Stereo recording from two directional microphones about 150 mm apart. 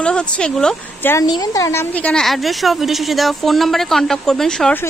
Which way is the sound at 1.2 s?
25° left (ahead or behind).